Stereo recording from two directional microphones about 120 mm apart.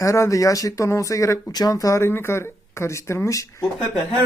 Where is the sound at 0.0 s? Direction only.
25° left (ahead or behind).